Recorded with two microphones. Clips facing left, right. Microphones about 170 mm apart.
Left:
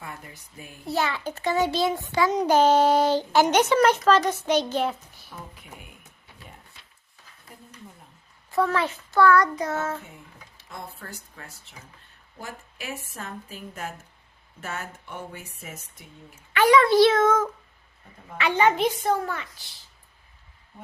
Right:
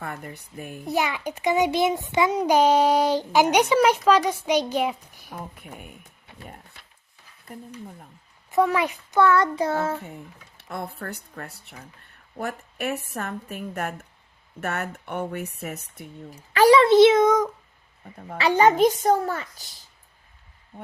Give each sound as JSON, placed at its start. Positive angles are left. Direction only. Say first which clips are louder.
{"t": 0.0, "sound": "a woman's voice", "louder": "right 6 dB", "side_deg": -50}
{"t": 0.9, "sound": "a child's voice", "louder": "right 1 dB", "side_deg": -15}
{"t": 8.4, "sound": "a child's voice", "louder": "right 3 dB", "side_deg": -20}
{"t": 10.6, "sound": "a woman's voice", "louder": "right 7 dB", "side_deg": -65}
{"t": 16.3, "sound": "a child's voice", "louder": "right 3 dB", "side_deg": -35}
{"t": 18.3, "sound": "a child's voice", "louder": "right 4 dB", "side_deg": -40}